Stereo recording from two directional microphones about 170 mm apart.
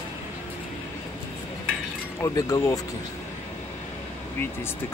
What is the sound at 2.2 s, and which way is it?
Speech, 20° left (ahead or behind).